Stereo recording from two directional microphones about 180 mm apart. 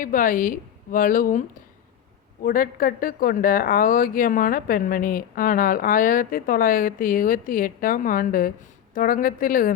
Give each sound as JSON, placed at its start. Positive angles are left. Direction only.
{"t": 0.0, "sound": "a woman's voice", "side_deg": 50}